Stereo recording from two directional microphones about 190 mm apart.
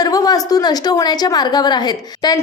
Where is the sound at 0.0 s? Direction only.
20° left (ahead or behind).